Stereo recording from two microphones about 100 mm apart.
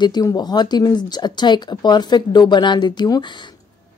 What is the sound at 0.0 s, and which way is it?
A woman's voice, 40° left (ahead or behind).